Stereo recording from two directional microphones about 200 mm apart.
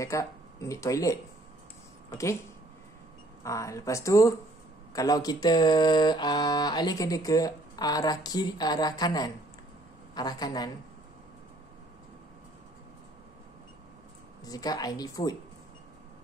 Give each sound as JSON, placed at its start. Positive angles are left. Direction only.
{"t": 0.0, "sound": "speech", "side_deg": 15}
{"t": 3.4, "sound": "speech", "side_deg": 15}
{"t": 14.4, "sound": "speech", "side_deg": 20}